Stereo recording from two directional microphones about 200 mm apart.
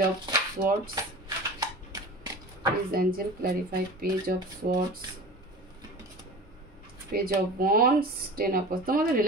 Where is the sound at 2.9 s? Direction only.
50° right (ahead or behind).